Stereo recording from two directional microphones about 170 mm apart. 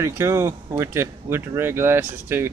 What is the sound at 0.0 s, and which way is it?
A man's voice, 15° right (ahead or behind).